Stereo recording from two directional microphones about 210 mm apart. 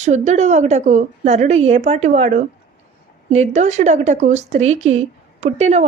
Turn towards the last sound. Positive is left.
turn(degrees=-30)  # may be behind; listen again after turning